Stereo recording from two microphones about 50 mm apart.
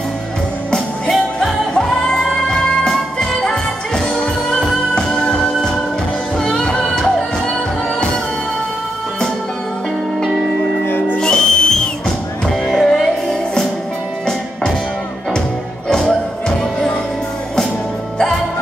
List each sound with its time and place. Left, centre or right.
0.7 s music: centre
11.1 s music: centre
15.9 s music: centre